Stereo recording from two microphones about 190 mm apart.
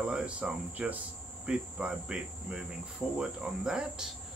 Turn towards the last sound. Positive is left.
turn(degrees=-5)  # may be behind; listen again after turning